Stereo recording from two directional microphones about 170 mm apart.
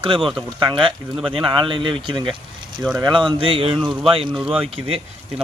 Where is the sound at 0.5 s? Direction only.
30° right (ahead or behind).